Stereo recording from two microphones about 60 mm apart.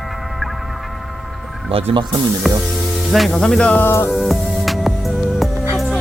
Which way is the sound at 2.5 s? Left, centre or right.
Centre.